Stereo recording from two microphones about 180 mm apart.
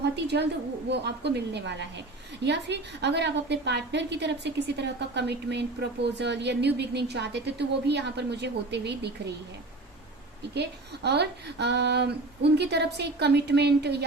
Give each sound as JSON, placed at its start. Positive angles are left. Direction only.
{"t": 0.0, "sound": "a woman's voice", "side_deg": -70}
{"t": 10.5, "sound": "a woman's voice", "side_deg": -65}